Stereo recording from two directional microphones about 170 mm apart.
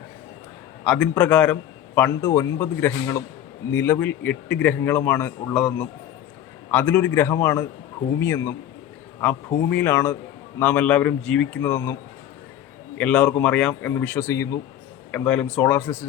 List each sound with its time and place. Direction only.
0.9 s speech: 5° left (ahead or behind)
9.6 s speech: 10° left (ahead or behind)
13.0 s speech: 10° left (ahead or behind)